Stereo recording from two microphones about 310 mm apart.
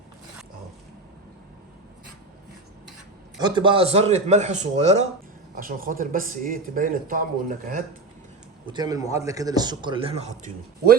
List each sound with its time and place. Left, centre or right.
3.3 s a man's voice: centre
8.7 s a man's voice: centre